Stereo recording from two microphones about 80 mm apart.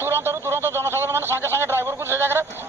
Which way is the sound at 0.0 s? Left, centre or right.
Right.